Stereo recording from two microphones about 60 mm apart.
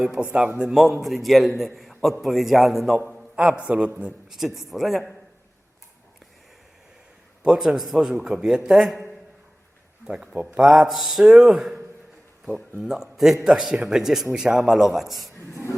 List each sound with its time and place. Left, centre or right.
0.2 s a man's voice: right
0.6 s a man's voice: centre
3.3 s a man's voice: centre
4.3 s a man's voice: centre
7.4 s a man's voice: centre
10.6 s a man's voice: centre
12.8 s a man's voice: centre